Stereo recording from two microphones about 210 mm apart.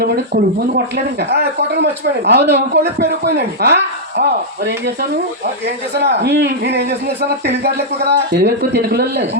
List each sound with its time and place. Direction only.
0.7 s a man's voice: 50° right (ahead or behind)
6.0 s a man's voice: 50° right (ahead or behind)